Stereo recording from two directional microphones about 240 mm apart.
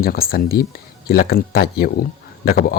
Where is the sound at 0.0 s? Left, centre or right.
Left.